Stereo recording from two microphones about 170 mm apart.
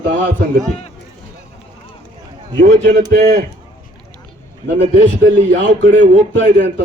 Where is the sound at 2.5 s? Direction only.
50° right (ahead or behind).